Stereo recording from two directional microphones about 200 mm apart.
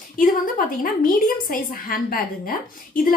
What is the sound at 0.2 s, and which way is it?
A woman's voice, 45° left (ahead or behind).